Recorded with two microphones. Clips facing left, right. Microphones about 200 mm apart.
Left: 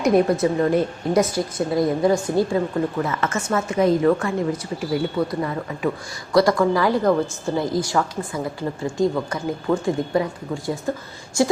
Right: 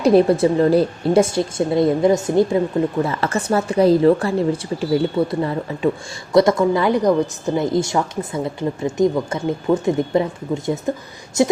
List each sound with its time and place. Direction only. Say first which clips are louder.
0.0 s a woman's voice: right 4 dB; 30° right (ahead or behind)
3.0 s a woman's voice: right 3 dB; 35° right (ahead or behind)